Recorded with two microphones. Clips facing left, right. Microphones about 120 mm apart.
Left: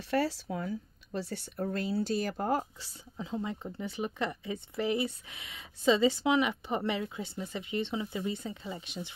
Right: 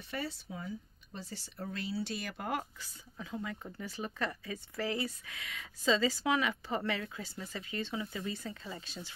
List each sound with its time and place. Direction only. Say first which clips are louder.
0.1 s speech: left 10 dB; 80° left; by 9.1 s 20° left (ahead or behind)